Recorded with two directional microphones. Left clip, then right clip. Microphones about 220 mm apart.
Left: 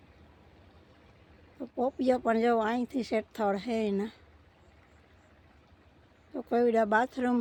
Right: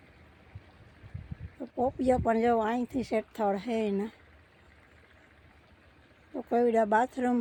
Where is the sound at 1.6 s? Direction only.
Centre (ahead or behind).